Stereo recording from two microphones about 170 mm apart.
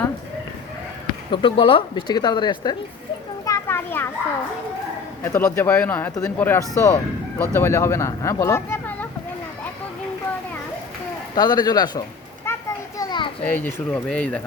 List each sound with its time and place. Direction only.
1.3 s speech: 30° left (ahead or behind)
3.4 s children playing: 15° left (ahead or behind)
5.2 s speech: 15° left (ahead or behind)
11.3 s speech: 25° left (ahead or behind)
12.5 s children playing: 15° left (ahead or behind)
13.0 s children playing: 25° left (ahead or behind)
13.4 s speech: 10° left (ahead or behind)